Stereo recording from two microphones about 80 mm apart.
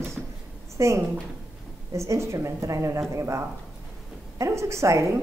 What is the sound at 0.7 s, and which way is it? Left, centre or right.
A woman's voice, right.